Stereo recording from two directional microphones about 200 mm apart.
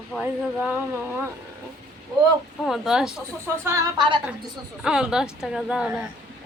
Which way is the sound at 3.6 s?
15° right (ahead or behind).